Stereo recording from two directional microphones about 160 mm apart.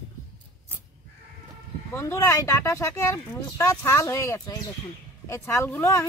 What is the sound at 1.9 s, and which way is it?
Speech, 15° left (ahead or behind).